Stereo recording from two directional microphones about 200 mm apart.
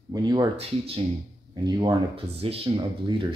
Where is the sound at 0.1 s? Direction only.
20° right (ahead or behind).